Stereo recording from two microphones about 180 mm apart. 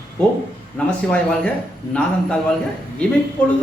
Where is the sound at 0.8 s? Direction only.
5° left (ahead or behind).